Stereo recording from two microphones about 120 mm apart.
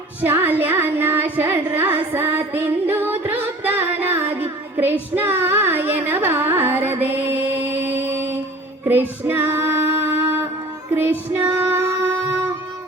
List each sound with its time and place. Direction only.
0.2 s music: 15° right (ahead or behind)
8.8 s female singing: 15° right (ahead or behind)